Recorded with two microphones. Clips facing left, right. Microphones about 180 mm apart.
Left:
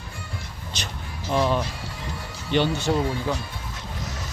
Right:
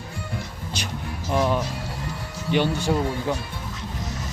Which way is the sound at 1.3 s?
10° right (ahead or behind).